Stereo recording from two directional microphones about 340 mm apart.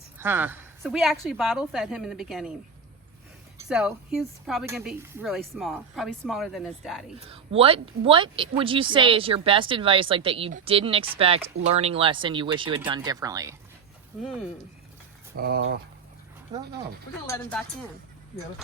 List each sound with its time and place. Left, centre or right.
0.2 s speech: centre
3.7 s speech: centre
7.3 s speech: centre
15.4 s speech: right
16.5 s speech: centre
17.2 s speech: centre